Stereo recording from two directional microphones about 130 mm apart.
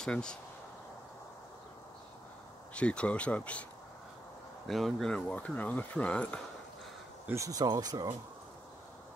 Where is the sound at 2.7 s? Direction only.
10° left (ahead or behind).